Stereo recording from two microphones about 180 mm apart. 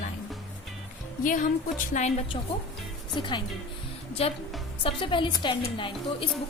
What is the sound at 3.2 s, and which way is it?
A woman's voice, 25° left (ahead or behind).